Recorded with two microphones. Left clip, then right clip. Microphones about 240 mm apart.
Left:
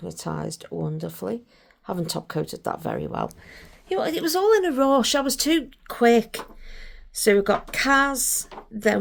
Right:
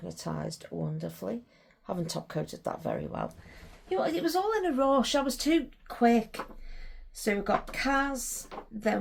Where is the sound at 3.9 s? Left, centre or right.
Left.